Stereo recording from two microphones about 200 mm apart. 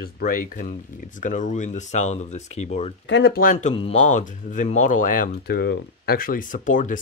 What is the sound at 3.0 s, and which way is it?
Speech, 60° left (ahead or behind).